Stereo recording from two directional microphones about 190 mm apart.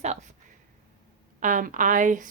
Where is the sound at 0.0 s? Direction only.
40° right (ahead or behind).